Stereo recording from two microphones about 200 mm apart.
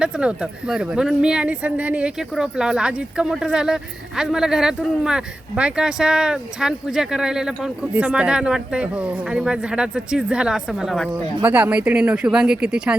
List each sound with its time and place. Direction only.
0.0 s speech: 5° right (ahead or behind)